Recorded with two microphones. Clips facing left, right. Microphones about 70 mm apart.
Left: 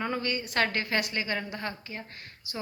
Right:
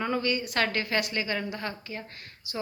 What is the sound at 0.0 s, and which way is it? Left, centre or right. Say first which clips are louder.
A woman's voice: right 3 dB; left.